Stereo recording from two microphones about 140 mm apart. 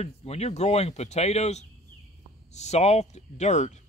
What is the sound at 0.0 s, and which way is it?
Speech, 50° left (ahead or behind).